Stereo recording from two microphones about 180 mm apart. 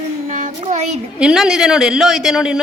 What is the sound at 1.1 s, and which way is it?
A woman's voice, 5° right (ahead or behind).